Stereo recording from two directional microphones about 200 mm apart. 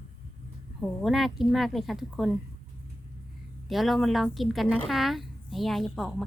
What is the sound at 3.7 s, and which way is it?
A woman's voice, centre (ahead or behind).